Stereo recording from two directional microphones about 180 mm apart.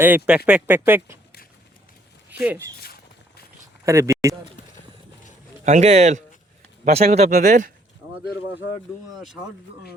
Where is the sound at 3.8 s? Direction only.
15° right (ahead or behind).